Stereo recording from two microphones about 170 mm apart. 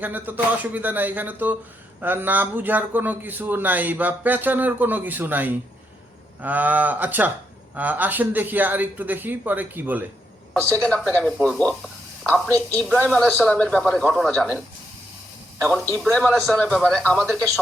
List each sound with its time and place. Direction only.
0.0 s a man's voice: 10° right (ahead or behind)
11.1 s a man's voice: 5° left (ahead or behind)
12.5 s a man's voice: 15° right (ahead or behind)
13.0 s speech: 10° left (ahead or behind)
16.1 s a man's voice: 5° left (ahead or behind)